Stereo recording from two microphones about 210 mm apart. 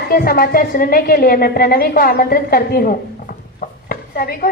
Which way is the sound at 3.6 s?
45° left (ahead or behind).